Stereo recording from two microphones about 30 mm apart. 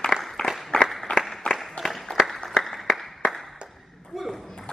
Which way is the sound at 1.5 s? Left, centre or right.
Left.